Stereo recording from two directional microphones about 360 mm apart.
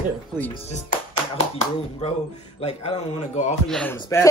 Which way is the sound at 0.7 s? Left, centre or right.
Centre.